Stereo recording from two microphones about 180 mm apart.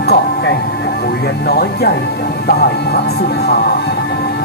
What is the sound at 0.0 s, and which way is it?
Music, 65° left (ahead or behind).